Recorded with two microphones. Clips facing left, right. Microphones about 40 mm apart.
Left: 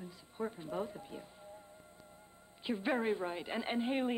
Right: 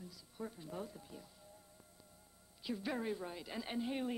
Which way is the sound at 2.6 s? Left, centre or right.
Left.